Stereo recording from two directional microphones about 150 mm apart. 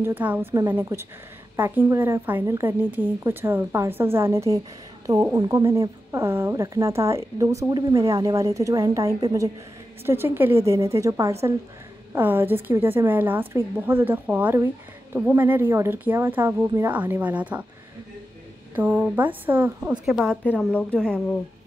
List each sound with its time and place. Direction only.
0.0 s a woman's voice: 10° right (ahead or behind)
18.8 s a woman's voice: 10° right (ahead or behind); by 21.2 s 5° left (ahead or behind)